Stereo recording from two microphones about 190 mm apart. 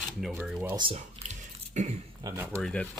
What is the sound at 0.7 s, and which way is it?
Speech, 30° right (ahead or behind).